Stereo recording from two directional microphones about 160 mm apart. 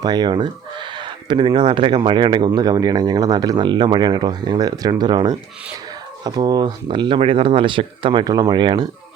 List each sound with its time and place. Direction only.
0.0 s speech: 25° right (ahead or behind)